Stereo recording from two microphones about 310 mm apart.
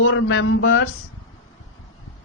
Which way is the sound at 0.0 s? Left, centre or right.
Left.